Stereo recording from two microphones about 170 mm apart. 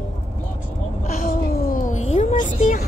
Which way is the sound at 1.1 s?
55° left (ahead or behind).